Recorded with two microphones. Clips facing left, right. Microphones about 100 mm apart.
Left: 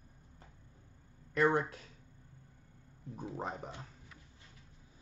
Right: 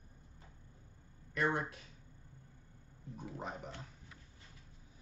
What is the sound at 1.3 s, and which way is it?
Speech, 35° left (ahead or behind).